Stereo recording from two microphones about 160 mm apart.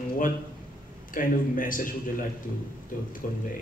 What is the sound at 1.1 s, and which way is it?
Speech, 60° left (ahead or behind).